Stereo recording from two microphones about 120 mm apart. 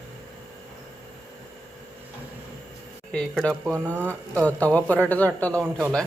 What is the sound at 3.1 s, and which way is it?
Speech, 5° left (ahead or behind).